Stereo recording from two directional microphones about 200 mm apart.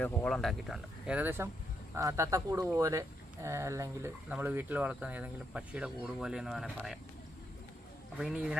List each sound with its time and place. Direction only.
0.0 s speech: 5° left (ahead or behind)
8.2 s speech: 5° right (ahead or behind)